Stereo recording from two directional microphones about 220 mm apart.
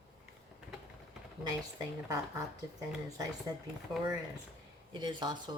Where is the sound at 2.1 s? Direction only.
15° right (ahead or behind).